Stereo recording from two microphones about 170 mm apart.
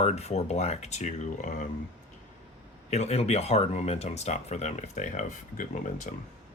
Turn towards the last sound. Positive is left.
turn(degrees=50)  # may be behind; listen again after turning